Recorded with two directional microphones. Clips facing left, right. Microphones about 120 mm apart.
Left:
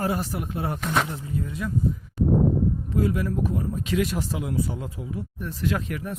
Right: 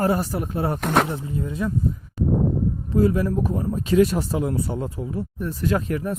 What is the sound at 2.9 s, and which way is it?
Speech, 35° right (ahead or behind).